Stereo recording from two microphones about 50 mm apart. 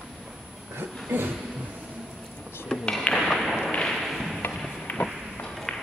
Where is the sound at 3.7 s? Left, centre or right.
Centre.